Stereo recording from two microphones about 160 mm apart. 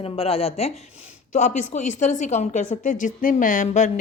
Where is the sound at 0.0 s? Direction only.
35° left (ahead or behind).